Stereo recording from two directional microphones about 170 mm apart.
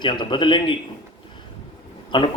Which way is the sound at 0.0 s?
30° left (ahead or behind).